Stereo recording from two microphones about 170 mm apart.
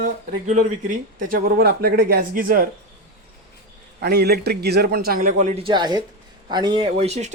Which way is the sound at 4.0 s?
65° right (ahead or behind).